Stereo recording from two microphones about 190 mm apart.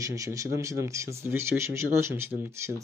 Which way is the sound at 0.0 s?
15° right (ahead or behind).